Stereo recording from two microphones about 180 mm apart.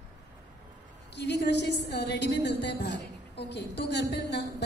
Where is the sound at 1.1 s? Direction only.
70° left (ahead or behind).